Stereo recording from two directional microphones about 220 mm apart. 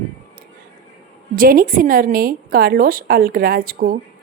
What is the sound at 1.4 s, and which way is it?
Speech, 40° right (ahead or behind).